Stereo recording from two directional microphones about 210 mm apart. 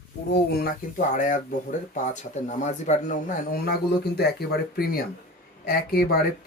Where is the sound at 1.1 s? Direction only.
40° left (ahead or behind).